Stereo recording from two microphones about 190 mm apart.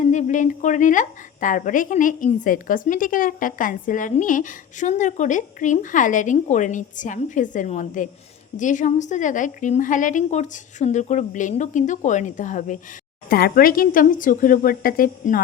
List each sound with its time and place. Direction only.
0.0 s a woman's voice: 40° left (ahead or behind)